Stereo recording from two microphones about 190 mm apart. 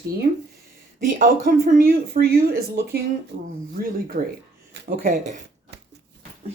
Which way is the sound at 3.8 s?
50° right (ahead or behind).